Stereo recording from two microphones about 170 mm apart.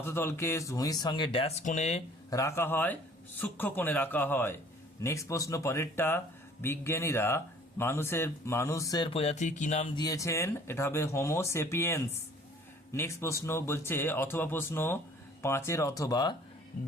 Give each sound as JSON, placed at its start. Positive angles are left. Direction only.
{"t": 0.0, "sound": "speech", "side_deg": 15}
{"t": 1.6, "sound": "speech", "side_deg": 40}
{"t": 2.3, "sound": "speech", "side_deg": 15}
{"t": 9.1, "sound": "speech", "side_deg": 40}
{"t": 9.9, "sound": "speech", "side_deg": 20}